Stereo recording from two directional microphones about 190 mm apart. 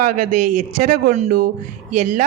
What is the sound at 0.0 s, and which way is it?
A man's voice, 45° right (ahead or behind).